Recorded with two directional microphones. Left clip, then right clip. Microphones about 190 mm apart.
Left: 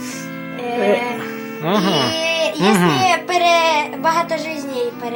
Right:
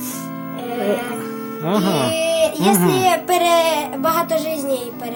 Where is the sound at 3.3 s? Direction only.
55° right (ahead or behind).